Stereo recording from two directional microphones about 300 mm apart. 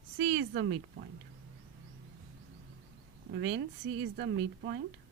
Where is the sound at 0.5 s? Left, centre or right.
Right.